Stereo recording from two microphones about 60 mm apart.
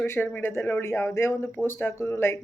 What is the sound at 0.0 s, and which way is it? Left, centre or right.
Speech, left.